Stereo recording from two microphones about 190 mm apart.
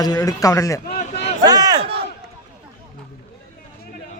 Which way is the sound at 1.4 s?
20° right (ahead or behind).